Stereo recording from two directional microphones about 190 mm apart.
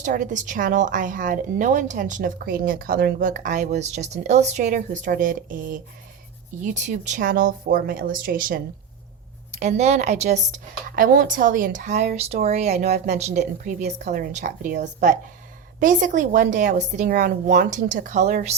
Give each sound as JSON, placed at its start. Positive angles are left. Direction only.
{"t": 0.0, "sound": "a woman's voice", "side_deg": -40}
{"t": 9.6, "sound": "a woman's voice", "side_deg": -35}